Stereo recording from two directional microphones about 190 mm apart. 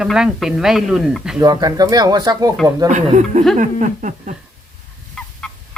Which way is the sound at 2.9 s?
40° right (ahead or behind).